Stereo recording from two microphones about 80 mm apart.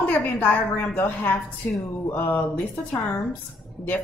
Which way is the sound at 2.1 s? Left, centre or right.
Left.